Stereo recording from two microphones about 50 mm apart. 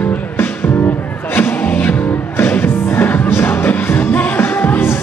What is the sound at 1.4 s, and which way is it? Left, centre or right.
Music, left.